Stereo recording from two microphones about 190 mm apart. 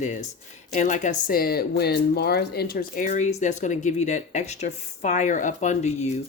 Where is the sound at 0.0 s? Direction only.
40° left (ahead or behind).